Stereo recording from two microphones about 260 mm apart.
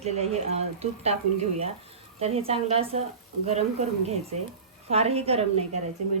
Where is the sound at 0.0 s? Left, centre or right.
Right.